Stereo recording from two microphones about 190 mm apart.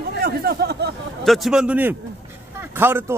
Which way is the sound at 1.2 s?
Centre (ahead or behind).